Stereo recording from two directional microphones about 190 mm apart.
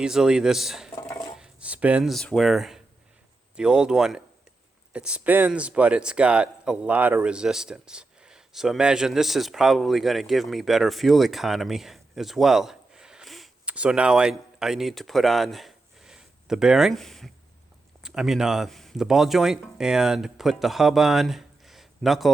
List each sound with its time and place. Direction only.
0.0 s a man's voice: 5° right (ahead or behind)
1.0 s a sound: 15° left (ahead or behind)
1.4 s a man's voice: 5° right (ahead or behind)